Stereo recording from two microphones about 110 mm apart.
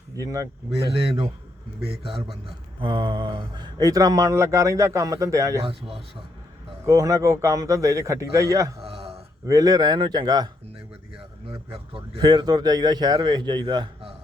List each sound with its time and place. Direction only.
0.2 s speech: 30° right (ahead or behind)
2.0 s speech: 55° right (ahead or behind); by 5.6 s 30° right (ahead or behind)
5.6 s speech: 55° right (ahead or behind)
6.8 s a man's voice: 30° right (ahead or behind)
8.8 s a sound: 60° right (ahead or behind)
9.5 s speech: 35° right (ahead or behind)
11.7 s speech: 50° right (ahead or behind)
12.2 s speech: 40° right (ahead or behind)